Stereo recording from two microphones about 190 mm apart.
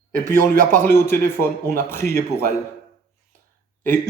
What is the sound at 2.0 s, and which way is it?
Speech, 55° left (ahead or behind).